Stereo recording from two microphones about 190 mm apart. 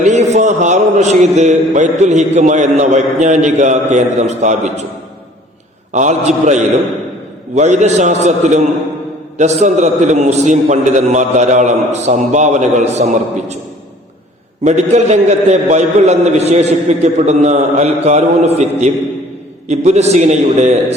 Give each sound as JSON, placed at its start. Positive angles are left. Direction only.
{"t": 0.0, "sound": "a man's voice", "side_deg": -35}
{"t": 5.9, "sound": "a man's voice", "side_deg": -40}
{"t": 14.6, "sound": "a man's voice", "side_deg": -35}